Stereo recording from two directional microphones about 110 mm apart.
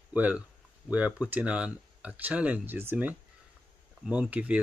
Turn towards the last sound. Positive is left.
turn(degrees=-10)  # may be behind; listen again after turning